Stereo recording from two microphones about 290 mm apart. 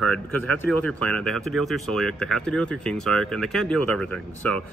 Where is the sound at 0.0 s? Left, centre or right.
Centre.